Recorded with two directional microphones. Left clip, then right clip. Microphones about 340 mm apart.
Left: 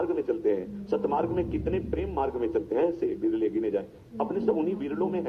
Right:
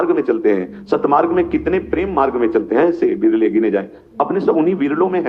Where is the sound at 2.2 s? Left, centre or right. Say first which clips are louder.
Right 13 dB; right.